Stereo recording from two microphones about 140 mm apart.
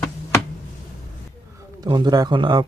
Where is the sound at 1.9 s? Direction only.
30° right (ahead or behind).